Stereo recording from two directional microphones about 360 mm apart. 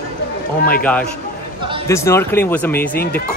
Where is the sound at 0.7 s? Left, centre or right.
Centre.